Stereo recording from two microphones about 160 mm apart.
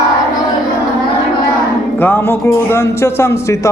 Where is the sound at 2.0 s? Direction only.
15° left (ahead or behind).